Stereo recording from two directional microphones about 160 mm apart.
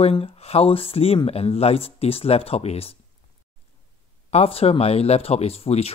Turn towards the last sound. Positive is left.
turn(degrees=40)  # may be behind; listen again after turning